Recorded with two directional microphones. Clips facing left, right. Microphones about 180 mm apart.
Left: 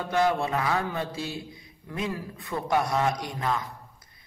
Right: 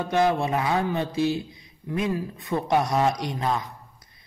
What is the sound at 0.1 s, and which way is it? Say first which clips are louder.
A man's voice: right 2 dB; 20° right (ahead or behind).